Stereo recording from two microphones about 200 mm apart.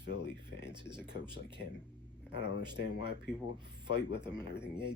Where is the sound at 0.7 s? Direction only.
25° right (ahead or behind).